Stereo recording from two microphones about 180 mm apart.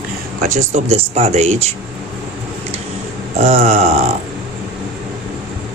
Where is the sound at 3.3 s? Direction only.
40° right (ahead or behind).